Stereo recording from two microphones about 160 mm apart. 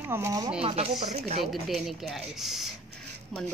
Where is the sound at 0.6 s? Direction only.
40° right (ahead or behind).